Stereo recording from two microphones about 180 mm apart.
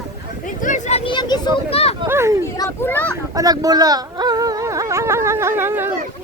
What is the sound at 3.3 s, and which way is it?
Speech, 20° right (ahead or behind).